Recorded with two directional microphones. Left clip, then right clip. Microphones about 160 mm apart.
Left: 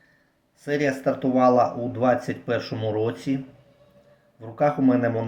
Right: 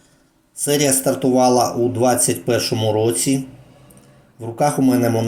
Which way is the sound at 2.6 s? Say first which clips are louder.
Right 8 dB; 40° left (ahead or behind).